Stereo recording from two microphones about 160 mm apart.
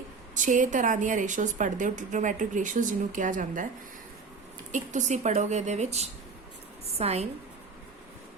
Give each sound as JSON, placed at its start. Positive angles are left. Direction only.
{"t": 0.3, "sound": "a woman's voice", "side_deg": -50}
{"t": 4.7, "sound": "a woman's voice", "side_deg": -50}